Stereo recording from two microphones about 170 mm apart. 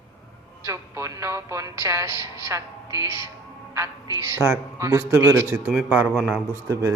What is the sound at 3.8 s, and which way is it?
A man's voice, 15° right (ahead or behind).